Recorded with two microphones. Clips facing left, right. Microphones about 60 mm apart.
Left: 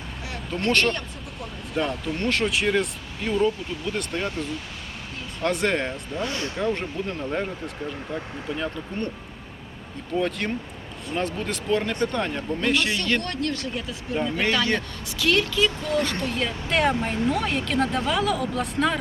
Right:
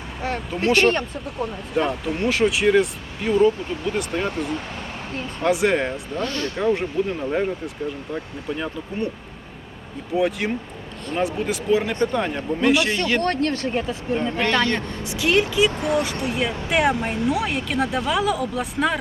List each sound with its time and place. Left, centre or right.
0.5 s speech: centre
1.7 s speech: centre
6.1 s speech: centre
6.6 s speech: centre
10.2 s speech: centre
13.2 s speech: right
14.8 s speech: right; by 18.9 s centre